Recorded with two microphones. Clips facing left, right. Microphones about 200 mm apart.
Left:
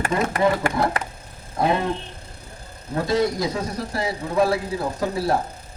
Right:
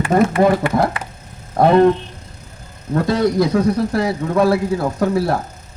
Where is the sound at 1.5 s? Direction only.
55° right (ahead or behind).